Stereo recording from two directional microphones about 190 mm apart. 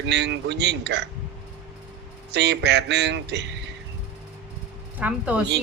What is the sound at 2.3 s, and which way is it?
Speech, 65° right (ahead or behind).